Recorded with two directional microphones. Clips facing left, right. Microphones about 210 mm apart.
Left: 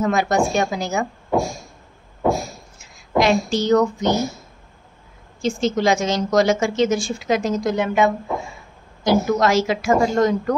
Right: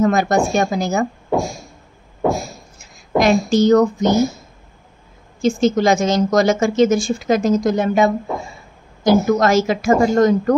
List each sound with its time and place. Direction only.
0.0 s a woman's voice: 45° right (ahead or behind)
3.2 s a woman's voice: 45° right (ahead or behind)
5.4 s a woman's voice: 50° right (ahead or behind)